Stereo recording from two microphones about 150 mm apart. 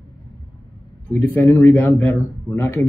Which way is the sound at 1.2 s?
15° left (ahead or behind).